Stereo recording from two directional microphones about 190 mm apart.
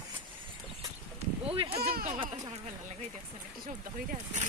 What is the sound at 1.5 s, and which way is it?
Speech, 30° right (ahead or behind).